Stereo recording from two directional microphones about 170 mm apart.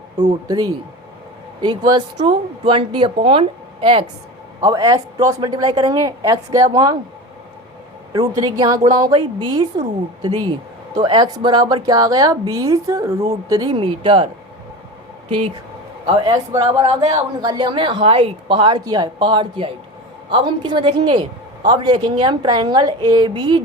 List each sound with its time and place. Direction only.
0.2 s a woman's voice: 25° right (ahead or behind)
4.6 s a woman's voice: 20° right (ahead or behind)
8.1 s a woman's voice: 25° right (ahead or behind)
10.9 s a woman's voice: 25° right (ahead or behind)
16.0 s a woman's voice: 25° right (ahead or behind)